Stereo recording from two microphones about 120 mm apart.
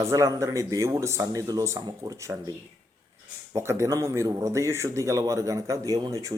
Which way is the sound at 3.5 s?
25° right (ahead or behind).